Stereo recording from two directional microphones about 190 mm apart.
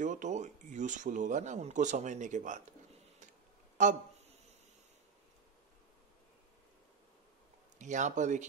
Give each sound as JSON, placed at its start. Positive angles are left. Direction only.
{"t": 0.0, "sound": "speech", "side_deg": -40}
{"t": 3.8, "sound": "speech", "side_deg": -40}
{"t": 7.8, "sound": "speech", "side_deg": -40}